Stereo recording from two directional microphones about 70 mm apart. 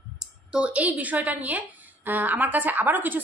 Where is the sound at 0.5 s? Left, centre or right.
Centre.